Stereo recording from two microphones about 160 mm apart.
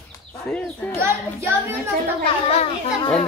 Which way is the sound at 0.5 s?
10° left (ahead or behind).